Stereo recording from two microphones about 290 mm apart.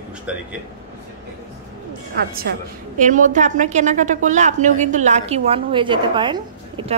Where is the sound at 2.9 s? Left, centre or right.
Right.